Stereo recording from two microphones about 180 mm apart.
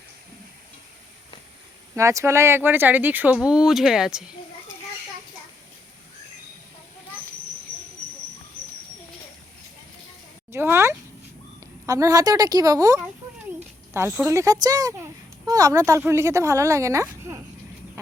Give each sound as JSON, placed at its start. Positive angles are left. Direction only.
{"t": 2.0, "sound": "speech", "side_deg": -15}
{"t": 10.5, "sound": "a sound", "side_deg": -15}
{"t": 11.6, "sound": "speech", "side_deg": -20}